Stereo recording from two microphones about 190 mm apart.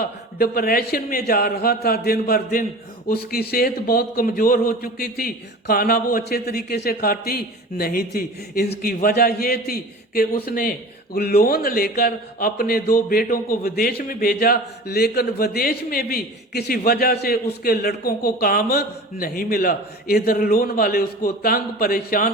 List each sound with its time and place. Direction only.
0.0 s speech: 50° left (ahead or behind)